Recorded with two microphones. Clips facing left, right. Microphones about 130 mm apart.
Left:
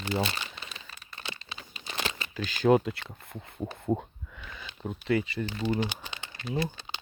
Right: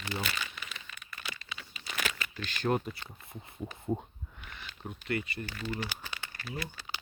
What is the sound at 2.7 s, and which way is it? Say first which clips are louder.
Speech: left 7 dB; 85° left.